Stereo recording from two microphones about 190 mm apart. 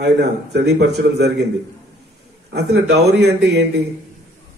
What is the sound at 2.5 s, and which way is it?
Speech, 60° right (ahead or behind).